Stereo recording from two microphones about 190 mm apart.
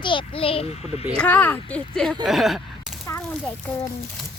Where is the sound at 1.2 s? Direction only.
10° left (ahead or behind).